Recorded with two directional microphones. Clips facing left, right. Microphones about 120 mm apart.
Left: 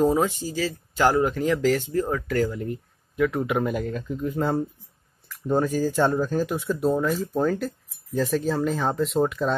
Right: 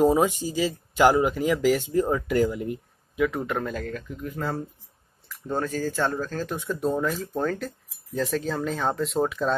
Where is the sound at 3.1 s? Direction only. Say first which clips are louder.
Left 2 dB; centre (ahead or behind).